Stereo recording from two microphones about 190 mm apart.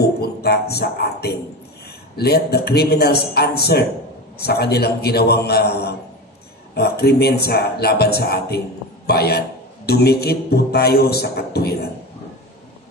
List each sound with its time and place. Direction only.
0.2 s a man's voice: 55° left (ahead or behind)